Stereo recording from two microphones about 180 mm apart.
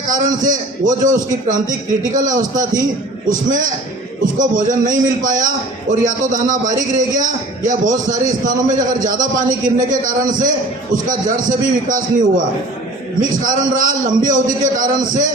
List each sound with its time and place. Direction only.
0.1 s a man's voice: 45° right (ahead or behind)
13.4 s a man's voice: 45° right (ahead or behind)